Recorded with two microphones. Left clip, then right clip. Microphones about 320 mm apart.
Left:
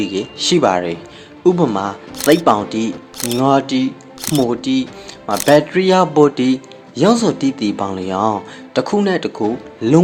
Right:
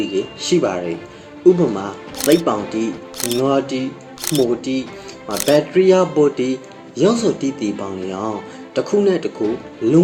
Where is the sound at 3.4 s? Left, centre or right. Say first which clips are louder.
Left 4 dB; left.